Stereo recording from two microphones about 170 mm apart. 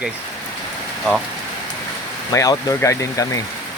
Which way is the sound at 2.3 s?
20° left (ahead or behind).